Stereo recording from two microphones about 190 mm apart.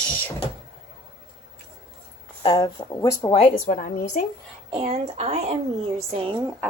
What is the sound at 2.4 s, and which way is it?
Speech, 25° left (ahead or behind).